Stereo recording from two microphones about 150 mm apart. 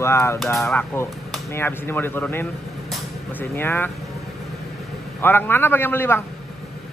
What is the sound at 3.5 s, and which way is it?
Speech, 15° left (ahead or behind).